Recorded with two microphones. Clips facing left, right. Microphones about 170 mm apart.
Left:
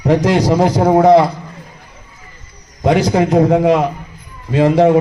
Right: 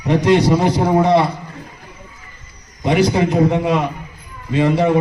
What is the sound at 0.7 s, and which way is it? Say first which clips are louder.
Speech: left 5 dB; 45° left (ahead or behind).